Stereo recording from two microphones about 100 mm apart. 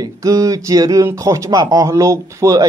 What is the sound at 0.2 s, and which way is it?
Speech, 35° right (ahead or behind).